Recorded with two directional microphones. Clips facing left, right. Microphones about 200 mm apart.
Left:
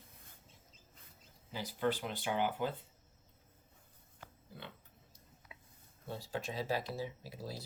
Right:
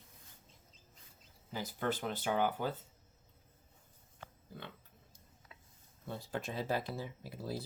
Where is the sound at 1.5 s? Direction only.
45° right (ahead or behind).